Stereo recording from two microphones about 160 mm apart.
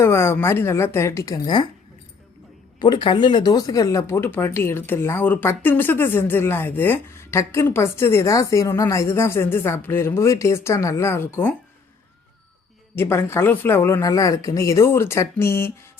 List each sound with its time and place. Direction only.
0.0 s speech: 15° left (ahead or behind)
2.7 s speech: 30° left (ahead or behind)
13.0 s speech: 15° left (ahead or behind)